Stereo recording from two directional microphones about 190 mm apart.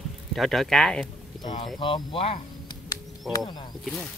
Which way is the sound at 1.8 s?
25° left (ahead or behind).